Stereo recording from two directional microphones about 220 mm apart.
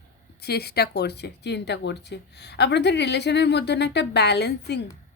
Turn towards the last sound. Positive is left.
turn(degrees=50)  # may be behind; listen again after turning